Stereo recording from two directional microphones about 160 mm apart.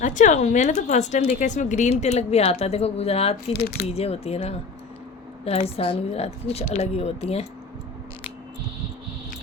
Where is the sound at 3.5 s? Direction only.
70° left (ahead or behind).